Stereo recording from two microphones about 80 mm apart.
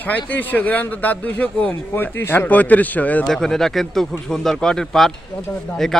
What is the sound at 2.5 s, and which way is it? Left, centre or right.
Speech, centre.